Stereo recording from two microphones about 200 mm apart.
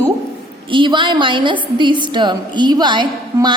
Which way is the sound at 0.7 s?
25° right (ahead or behind).